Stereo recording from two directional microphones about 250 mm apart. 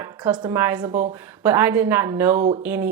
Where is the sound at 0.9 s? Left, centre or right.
Right.